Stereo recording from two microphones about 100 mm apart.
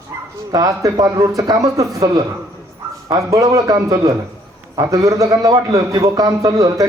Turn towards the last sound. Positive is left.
turn(degrees=-35)  # may be behind; listen again after turning